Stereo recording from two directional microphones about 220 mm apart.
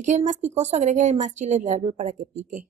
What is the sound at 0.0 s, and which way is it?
A woman's voice, 35° right (ahead or behind).